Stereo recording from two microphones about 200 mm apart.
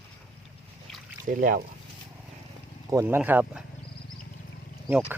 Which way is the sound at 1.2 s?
45° right (ahead or behind).